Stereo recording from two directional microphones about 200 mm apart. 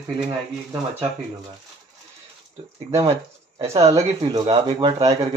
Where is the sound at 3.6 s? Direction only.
15° right (ahead or behind).